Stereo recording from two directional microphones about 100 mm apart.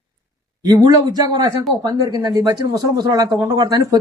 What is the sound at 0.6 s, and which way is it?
Speech, 40° right (ahead or behind).